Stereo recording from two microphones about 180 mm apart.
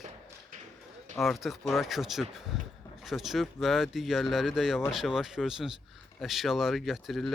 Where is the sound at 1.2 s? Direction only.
Centre (ahead or behind).